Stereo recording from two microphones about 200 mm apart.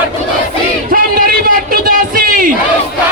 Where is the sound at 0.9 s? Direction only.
45° right (ahead or behind).